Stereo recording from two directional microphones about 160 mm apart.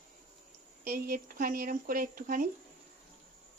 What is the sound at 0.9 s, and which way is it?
Speech, 65° right (ahead or behind).